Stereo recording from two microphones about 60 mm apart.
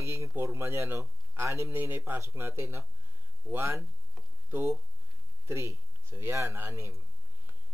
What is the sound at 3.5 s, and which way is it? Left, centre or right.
Speech, centre.